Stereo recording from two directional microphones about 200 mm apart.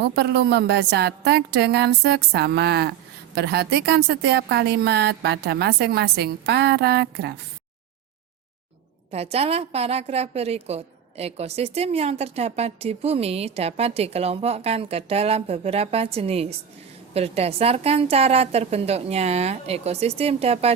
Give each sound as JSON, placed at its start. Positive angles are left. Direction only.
{"t": 0.0, "sound": "speech", "side_deg": -55}
{"t": 9.1, "sound": "a woman's voice", "side_deg": -30}